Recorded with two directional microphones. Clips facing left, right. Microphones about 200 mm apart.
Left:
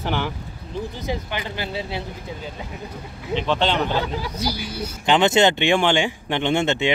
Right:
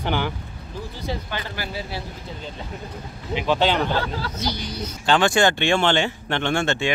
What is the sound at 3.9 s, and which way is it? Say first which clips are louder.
Speech: left 1 dB; 15° left (ahead or behind).